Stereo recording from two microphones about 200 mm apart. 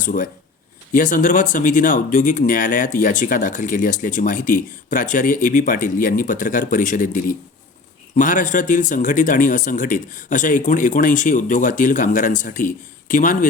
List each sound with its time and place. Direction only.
0.0 s speech: 40° left (ahead or behind)